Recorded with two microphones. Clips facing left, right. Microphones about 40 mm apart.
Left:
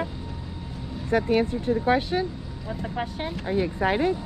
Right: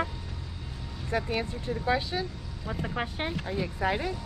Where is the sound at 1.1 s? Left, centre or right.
Left.